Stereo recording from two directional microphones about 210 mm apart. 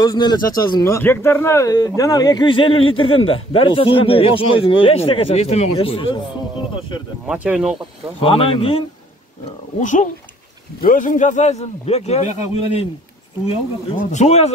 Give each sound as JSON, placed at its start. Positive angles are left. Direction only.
{"t": 0.0, "sound": "speech", "side_deg": 20}
{"t": 7.2, "sound": "speech", "side_deg": -5}
{"t": 8.2, "sound": "a man's voice", "side_deg": 25}